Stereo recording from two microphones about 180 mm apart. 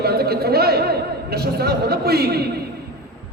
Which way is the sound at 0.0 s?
60° right (ahead or behind).